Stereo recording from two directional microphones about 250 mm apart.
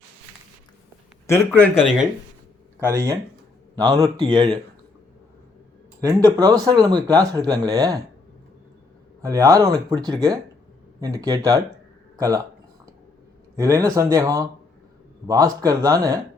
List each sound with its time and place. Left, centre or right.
1.3 s speech: centre
2.8 s speech: centre
6.0 s speech: centre
9.2 s speech: centre
13.6 s speech: centre